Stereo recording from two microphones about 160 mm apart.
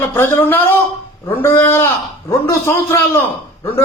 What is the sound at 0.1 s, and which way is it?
A man's voice, 15° left (ahead or behind).